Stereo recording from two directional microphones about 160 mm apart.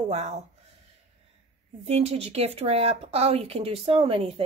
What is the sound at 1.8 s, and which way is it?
A woman's voice, 40° right (ahead or behind).